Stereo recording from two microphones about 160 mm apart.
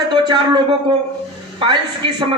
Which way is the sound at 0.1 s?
30° right (ahead or behind).